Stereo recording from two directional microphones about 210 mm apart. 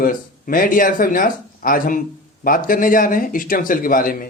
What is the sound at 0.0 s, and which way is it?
Speech, 40° left (ahead or behind).